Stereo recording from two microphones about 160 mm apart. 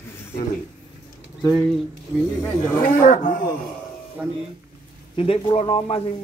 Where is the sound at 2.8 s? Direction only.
55° left (ahead or behind).